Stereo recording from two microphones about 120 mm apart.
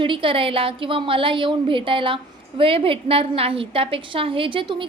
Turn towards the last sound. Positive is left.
turn(degrees=-45)  # may be behind; listen again after turning